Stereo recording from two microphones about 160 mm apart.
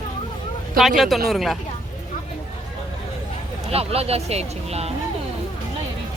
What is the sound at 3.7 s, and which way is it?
Speech, 40° right (ahead or behind).